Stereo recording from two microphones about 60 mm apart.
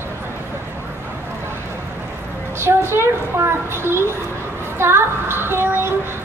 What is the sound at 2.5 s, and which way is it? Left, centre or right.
A child's voice, right.